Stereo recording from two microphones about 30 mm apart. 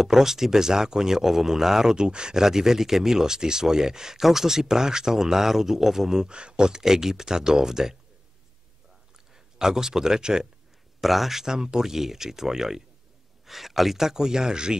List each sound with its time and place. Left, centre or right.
0.0 s speech: centre
6.2 s speech: right
6.8 s speech: centre
9.3 s a man's voice: centre
11.0 s speech: centre
11.4 s speech: right